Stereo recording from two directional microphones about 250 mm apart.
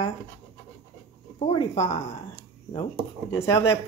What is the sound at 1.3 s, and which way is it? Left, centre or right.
Speech, left.